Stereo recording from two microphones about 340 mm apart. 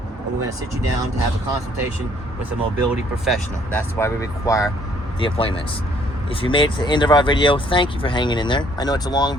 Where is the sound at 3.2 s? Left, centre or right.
Centre.